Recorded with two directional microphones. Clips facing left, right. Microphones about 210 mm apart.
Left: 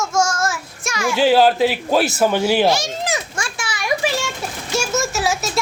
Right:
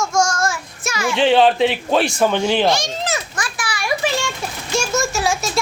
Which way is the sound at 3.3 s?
25° left (ahead or behind).